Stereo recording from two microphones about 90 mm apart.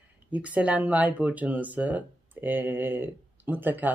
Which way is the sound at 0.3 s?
15° right (ahead or behind).